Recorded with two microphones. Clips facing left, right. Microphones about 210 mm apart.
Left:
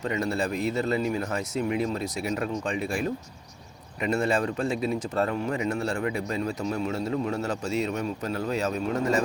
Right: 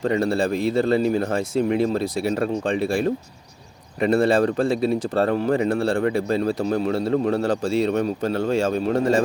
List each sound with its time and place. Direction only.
0.0 s a man's voice: 30° right (ahead or behind)